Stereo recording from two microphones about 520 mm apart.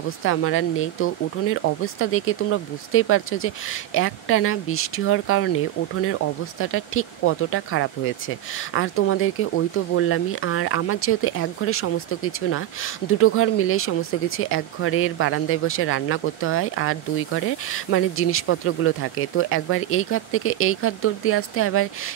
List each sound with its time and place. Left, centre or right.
0.2 s speech: left